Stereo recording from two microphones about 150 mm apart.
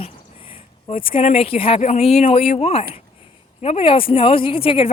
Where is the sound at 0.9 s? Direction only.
35° left (ahead or behind).